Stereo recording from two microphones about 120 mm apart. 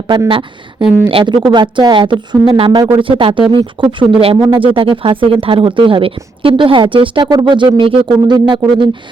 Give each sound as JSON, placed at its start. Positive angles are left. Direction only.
{"t": 0.3, "sound": "speech", "side_deg": -45}
{"t": 4.4, "sound": "speech", "side_deg": -35}
{"t": 4.6, "sound": "speech", "side_deg": -45}